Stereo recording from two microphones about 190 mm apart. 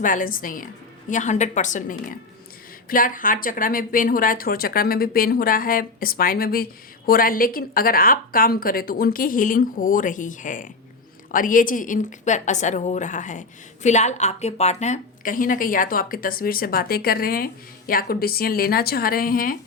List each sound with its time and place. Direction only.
0.0 s a woman's voice: 45° left (ahead or behind)